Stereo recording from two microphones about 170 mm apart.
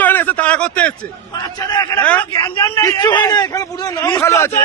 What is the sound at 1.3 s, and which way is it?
Speech, 25° left (ahead or behind).